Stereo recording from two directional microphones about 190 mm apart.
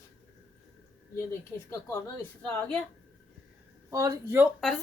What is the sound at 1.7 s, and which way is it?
A woman's voice, 15° left (ahead or behind).